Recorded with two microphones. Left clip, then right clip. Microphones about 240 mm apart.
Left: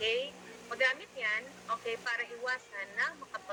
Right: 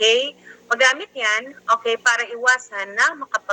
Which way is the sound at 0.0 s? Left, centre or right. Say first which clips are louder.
Right 16 dB; right.